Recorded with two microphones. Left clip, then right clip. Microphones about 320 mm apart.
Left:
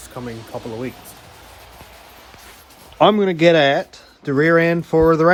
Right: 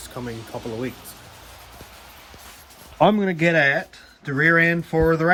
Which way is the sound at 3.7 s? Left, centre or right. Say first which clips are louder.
Left 4 dB; centre.